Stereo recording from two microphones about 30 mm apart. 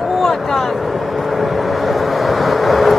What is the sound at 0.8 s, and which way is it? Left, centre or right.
Vehicle, centre.